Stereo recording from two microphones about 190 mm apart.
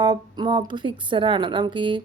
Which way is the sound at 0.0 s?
20° right (ahead or behind).